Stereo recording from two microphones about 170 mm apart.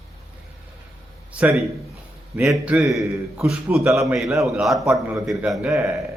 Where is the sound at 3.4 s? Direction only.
Centre (ahead or behind).